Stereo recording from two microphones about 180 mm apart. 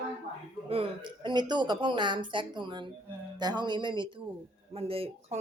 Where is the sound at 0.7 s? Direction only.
30° right (ahead or behind).